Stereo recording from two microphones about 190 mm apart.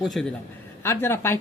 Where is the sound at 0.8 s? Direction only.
10° left (ahead or behind).